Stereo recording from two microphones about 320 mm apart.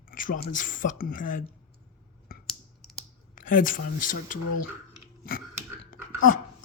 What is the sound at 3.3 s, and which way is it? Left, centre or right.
Speech, left.